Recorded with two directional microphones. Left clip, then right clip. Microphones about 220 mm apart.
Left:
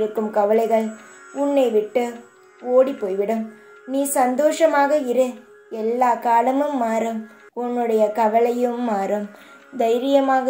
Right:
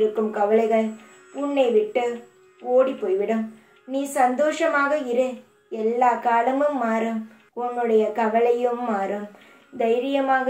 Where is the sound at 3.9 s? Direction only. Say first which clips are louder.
Left 2 dB; 45° left (ahead or behind).